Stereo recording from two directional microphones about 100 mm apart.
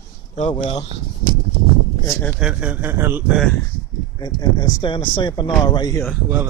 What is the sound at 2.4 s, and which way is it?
Speech, 15° right (ahead or behind).